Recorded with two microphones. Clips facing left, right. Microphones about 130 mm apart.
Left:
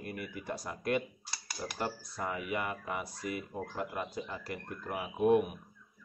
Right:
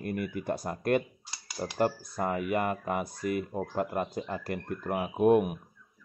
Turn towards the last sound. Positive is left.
turn(degrees=-50)  # may be behind; listen again after turning